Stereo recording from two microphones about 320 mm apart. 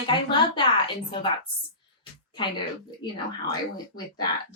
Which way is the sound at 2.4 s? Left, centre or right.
Centre.